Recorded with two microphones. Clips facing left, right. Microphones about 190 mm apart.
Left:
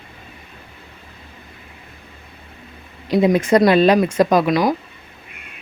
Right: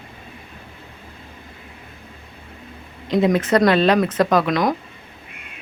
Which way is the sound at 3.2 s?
10° left (ahead or behind).